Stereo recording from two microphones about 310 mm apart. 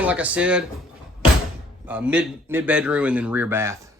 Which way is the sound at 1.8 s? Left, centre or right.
Centre.